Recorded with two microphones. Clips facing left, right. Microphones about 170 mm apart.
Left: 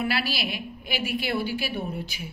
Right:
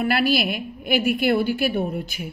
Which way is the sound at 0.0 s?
50° right (ahead or behind).